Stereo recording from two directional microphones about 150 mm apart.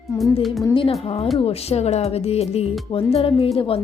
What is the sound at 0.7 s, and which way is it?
Speech, 40° left (ahead or behind).